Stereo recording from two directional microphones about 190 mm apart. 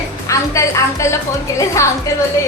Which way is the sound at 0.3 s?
15° left (ahead or behind).